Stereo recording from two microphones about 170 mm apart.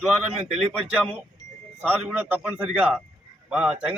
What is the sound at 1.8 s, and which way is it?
A man's voice, 10° right (ahead or behind).